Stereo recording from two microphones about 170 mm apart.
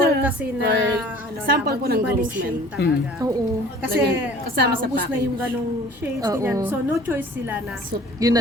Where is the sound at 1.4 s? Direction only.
60° right (ahead or behind).